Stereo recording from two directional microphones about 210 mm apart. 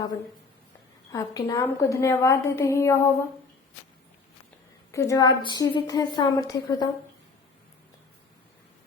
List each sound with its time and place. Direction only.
1.1 s a woman's voice: 15° left (ahead or behind)
4.9 s a woman's voice: 15° left (ahead or behind)